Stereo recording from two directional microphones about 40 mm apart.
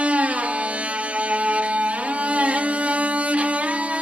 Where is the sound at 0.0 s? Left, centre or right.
Right.